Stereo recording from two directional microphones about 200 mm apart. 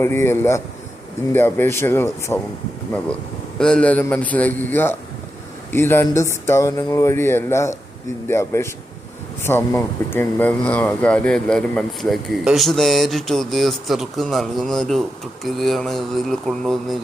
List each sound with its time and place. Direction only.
0.0 s speech: 10° left (ahead or behind)
3.6 s speech: 5° left (ahead or behind)